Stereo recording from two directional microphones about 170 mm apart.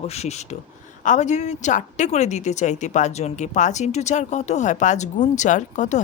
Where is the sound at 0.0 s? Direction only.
40° left (ahead or behind).